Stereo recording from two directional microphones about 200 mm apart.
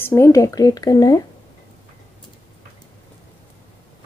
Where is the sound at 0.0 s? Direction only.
10° left (ahead or behind).